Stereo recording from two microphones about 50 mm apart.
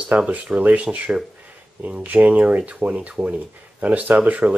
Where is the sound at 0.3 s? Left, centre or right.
Right.